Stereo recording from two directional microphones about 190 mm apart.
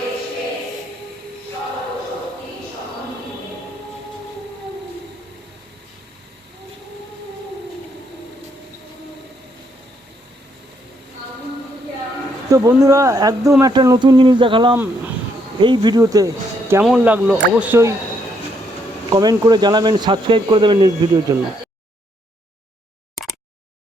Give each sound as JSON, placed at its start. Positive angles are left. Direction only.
{"t": 12.5, "sound": "speech", "side_deg": -20}
{"t": 16.8, "sound": "speech", "side_deg": -5}
{"t": 19.1, "sound": "speech", "side_deg": -20}